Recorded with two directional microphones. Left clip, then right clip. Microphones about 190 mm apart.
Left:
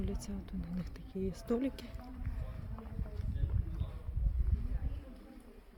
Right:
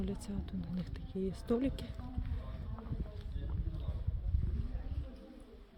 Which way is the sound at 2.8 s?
20° left (ahead or behind).